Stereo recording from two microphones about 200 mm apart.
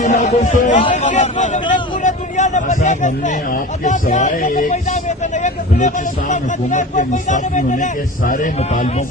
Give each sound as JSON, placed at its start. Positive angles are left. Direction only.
{"t": 0.0, "sound": "speech", "side_deg": 35}